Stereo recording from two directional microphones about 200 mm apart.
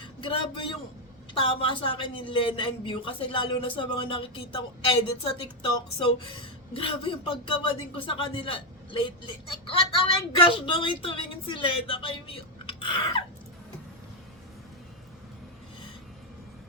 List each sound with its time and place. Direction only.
0.0 s vehicle: 25° left (ahead or behind)
1.3 s speech: 25° left (ahead or behind)